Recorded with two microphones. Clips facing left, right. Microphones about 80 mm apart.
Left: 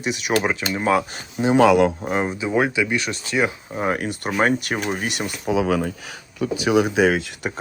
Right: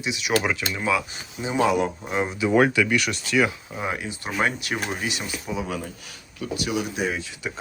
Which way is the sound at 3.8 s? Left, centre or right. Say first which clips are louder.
Left 6 dB; left.